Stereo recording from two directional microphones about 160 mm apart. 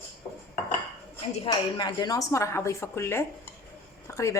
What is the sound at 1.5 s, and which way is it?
A woman's voice, 25° left (ahead or behind).